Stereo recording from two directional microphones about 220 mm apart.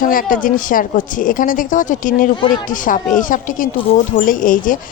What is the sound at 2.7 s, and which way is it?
Speech, 35° left (ahead or behind).